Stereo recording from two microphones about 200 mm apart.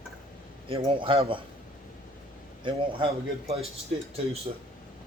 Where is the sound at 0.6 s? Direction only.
25° right (ahead or behind).